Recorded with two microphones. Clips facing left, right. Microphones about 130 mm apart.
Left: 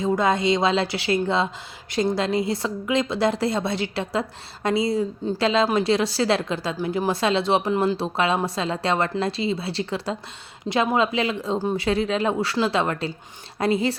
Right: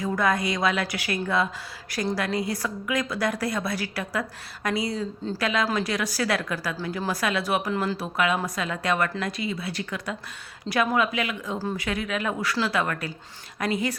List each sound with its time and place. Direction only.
0.0 s a woman's voice: 25° left (ahead or behind)